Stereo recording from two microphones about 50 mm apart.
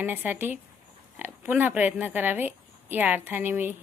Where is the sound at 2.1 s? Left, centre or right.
Right.